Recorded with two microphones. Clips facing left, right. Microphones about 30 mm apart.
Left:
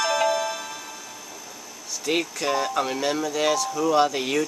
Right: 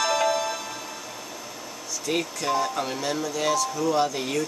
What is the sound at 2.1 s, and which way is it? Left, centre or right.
Speech, left.